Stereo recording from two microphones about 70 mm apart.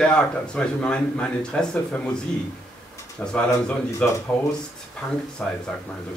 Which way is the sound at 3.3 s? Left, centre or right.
Centre.